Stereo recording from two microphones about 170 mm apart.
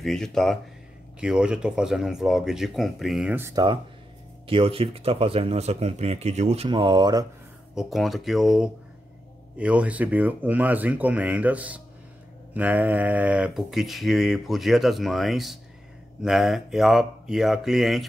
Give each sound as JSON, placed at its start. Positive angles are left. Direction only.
{"t": 0.0, "sound": "speech", "side_deg": 5}
{"t": 3.3, "sound": "speech", "side_deg": -15}
{"t": 4.5, "sound": "speech", "side_deg": -35}
{"t": 7.7, "sound": "speech", "side_deg": 0}